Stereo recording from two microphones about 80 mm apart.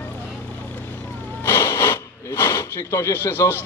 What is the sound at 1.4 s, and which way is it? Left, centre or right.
Speech, left.